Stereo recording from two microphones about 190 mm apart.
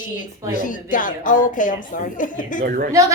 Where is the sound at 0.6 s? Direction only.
45° left (ahead or behind).